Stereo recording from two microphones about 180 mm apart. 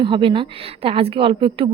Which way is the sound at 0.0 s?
30° right (ahead or behind).